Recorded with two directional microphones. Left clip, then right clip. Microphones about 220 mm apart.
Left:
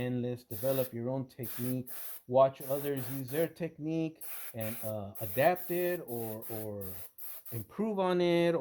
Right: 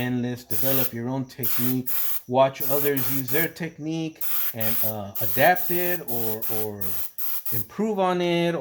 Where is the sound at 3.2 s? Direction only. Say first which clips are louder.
Right 6 dB; 35° left (ahead or behind).